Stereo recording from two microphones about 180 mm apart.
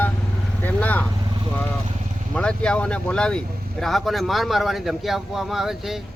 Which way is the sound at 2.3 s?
5° left (ahead or behind).